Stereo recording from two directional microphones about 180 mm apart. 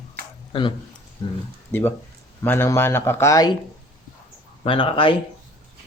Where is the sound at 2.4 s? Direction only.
15° left (ahead or behind).